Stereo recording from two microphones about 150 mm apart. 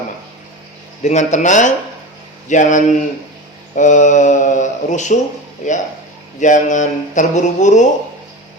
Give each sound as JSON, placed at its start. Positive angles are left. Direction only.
{"t": 1.0, "sound": "speech", "side_deg": 50}